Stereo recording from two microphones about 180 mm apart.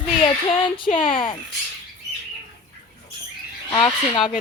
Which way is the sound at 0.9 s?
30° left (ahead or behind).